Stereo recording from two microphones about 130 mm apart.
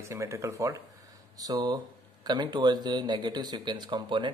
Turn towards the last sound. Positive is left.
turn(degrees=-35)  # may be behind; listen again after turning